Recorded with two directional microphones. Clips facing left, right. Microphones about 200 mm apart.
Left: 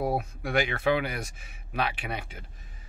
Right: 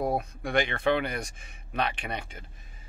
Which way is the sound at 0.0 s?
5° left (ahead or behind).